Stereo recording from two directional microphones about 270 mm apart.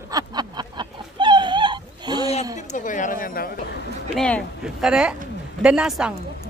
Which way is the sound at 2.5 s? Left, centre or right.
Left.